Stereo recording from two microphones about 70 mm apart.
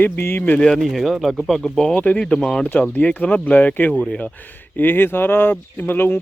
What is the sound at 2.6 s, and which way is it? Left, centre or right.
Speech, left.